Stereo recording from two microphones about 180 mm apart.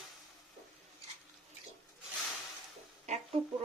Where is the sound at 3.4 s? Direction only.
35° right (ahead or behind).